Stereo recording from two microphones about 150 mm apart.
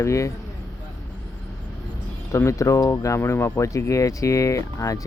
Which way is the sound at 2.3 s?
20° left (ahead or behind).